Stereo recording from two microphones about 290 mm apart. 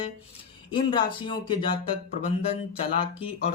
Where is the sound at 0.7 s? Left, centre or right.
Centre.